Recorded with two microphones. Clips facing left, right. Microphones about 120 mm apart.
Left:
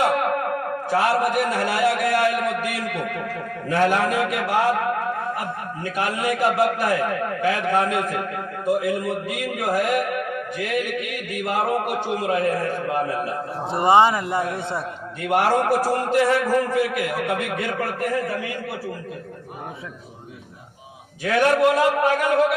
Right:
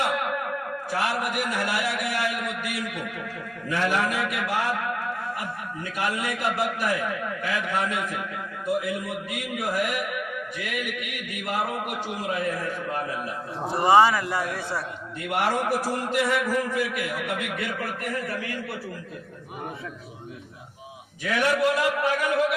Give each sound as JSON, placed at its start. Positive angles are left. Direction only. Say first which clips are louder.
{"t": 0.0, "sound": "a sound", "louder": "left 6 dB", "side_deg": 50}
{"t": 1.2, "sound": "speech", "louder": "left 6 dB", "side_deg": 40}
{"t": 2.1, "sound": "a sound", "louder": "left 8 dB", "side_deg": 45}
{"t": 2.9, "sound": "a man's voice", "louder": "left 6 dB", "side_deg": 55}
{"t": 7.2, "sound": "a man's voice", "louder": "left 6 dB", "side_deg": 55}
{"t": 10.1, "sound": "music", "louder": "left 6 dB", "side_deg": 45}
{"t": 11.6, "sound": "a man's voice", "louder": "left 7 dB", "side_deg": 40}
{"t": 12.0, "sound": "a man's voice", "louder": "left 5 dB", "side_deg": 60}
{"t": 13.7, "sound": "a man's voice", "louder": "left 2 dB", "side_deg": 25}
{"t": 15.4, "sound": "a man's voice", "louder": "left 5 dB", "side_deg": 55}
{"t": 16.9, "sound": "a man's voice", "louder": "left 5 dB", "side_deg": 45}
{"t": 21.2, "sound": "a man's voice", "louder": "left 5 dB", "side_deg": 45}